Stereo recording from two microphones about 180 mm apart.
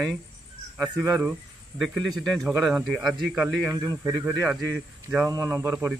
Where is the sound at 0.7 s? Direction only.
5° right (ahead or behind).